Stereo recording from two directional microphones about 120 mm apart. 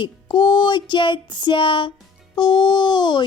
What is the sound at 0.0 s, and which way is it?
Music, 40° left (ahead or behind).